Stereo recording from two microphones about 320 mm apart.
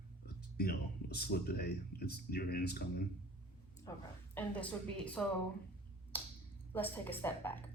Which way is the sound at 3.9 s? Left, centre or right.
Centre.